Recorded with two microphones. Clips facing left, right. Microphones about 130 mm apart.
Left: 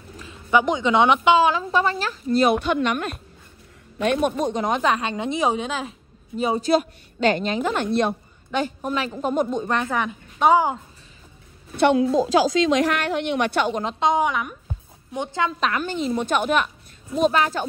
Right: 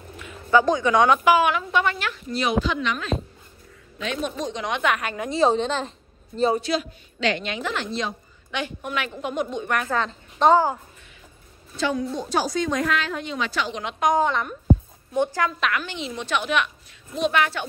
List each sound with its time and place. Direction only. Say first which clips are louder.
0.5 s a woman's voice: right 1 dB; 20° left (ahead or behind)
6.7 s a woman's voice: left 6 dB; 50° left (ahead or behind)
8.5 s a woman's voice: left 5 dB; 40° left (ahead or behind)
9.7 s a woman's voice: left 1 dB; 25° left (ahead or behind)
11.7 s a woman's voice: left 8 dB; 65° left (ahead or behind)
13.8 s a woman's voice: even; 25° left (ahead or behind)
14.2 s a woman's voice: even; 10° left (ahead or behind)
15.1 s a woman's voice: right 2 dB; 20° left (ahead or behind)
15.6 s a woman's voice: left 3 dB; 40° left (ahead or behind)